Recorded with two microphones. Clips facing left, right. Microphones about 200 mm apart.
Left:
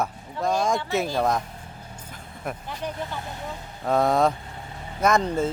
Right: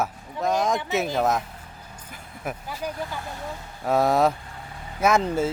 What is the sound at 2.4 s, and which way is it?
Speech, 5° right (ahead or behind).